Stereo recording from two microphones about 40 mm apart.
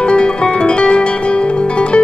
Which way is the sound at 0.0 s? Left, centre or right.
Left.